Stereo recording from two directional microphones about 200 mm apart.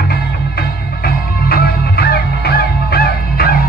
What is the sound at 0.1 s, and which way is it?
Music, 50° left (ahead or behind).